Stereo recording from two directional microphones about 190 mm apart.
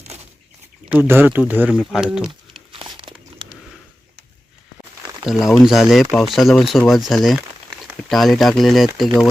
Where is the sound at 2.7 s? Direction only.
25° right (ahead or behind).